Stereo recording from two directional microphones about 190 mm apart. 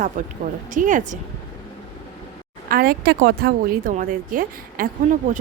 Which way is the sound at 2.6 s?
50° right (ahead or behind).